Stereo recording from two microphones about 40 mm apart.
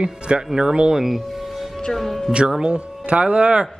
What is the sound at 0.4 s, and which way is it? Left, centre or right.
Speech, centre.